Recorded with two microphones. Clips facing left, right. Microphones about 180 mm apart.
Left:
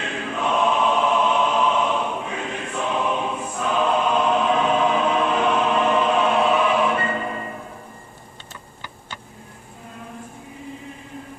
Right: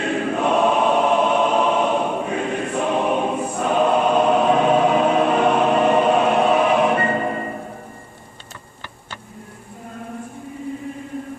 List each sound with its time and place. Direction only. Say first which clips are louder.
0.0 s choir: right 6 dB; 45° right (ahead or behind)